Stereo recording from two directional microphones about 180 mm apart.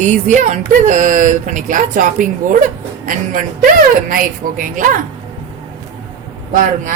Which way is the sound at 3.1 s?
50° right (ahead or behind).